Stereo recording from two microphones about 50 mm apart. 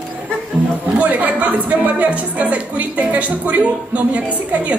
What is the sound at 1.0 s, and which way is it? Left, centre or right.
A woman's voice, right.